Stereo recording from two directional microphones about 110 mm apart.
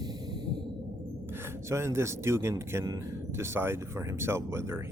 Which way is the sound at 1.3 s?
20° right (ahead or behind).